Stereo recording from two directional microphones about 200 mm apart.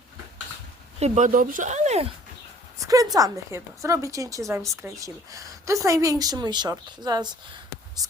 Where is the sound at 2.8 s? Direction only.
15° right (ahead or behind).